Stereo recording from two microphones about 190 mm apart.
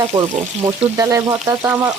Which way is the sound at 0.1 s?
35° right (ahead or behind).